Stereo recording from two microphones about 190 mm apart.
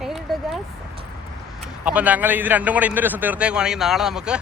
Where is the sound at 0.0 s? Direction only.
5° right (ahead or behind).